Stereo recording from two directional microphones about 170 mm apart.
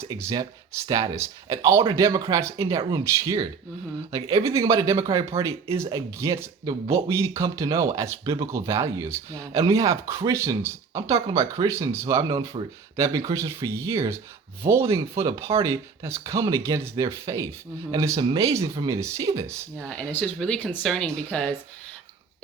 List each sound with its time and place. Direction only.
0.0 s speech: 15° right (ahead or behind)
15.2 s speech: 15° right (ahead or behind)
19.8 s speech: 5° left (ahead or behind)